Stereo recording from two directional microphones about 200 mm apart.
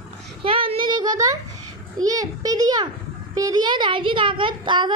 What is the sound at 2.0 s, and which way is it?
A child's voice, 15° right (ahead or behind).